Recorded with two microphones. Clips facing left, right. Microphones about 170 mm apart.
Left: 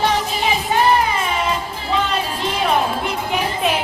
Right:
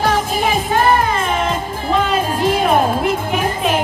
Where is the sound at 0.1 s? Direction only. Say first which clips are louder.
Right 3 dB; 50° right (ahead or behind).